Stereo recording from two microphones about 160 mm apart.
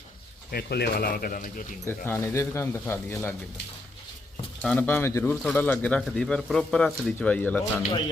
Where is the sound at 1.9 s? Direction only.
15° left (ahead or behind).